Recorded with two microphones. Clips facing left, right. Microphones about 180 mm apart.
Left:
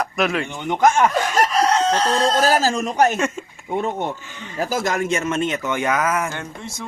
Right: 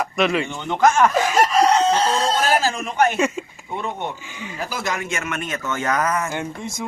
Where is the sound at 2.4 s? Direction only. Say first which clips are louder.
Left 2 dB; 35° left (ahead or behind).